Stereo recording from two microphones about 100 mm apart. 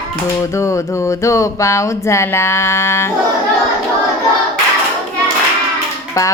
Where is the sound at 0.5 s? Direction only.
30° left (ahead or behind).